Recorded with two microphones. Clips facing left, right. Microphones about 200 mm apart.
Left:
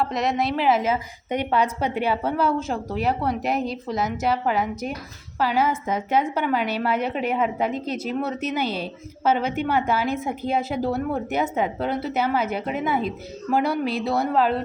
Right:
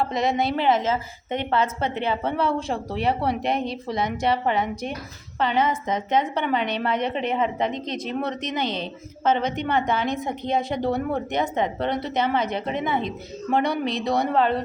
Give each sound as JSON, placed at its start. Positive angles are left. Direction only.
{"t": 0.0, "sound": "a woman's voice", "side_deg": 0}